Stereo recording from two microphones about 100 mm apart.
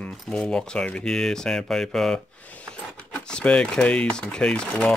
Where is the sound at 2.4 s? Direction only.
15° left (ahead or behind).